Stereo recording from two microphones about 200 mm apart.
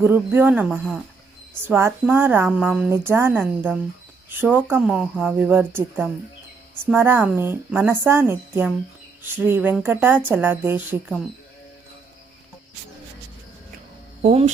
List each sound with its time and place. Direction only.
0.0 s speech: 10° right (ahead or behind)
14.2 s speech: 30° right (ahead or behind)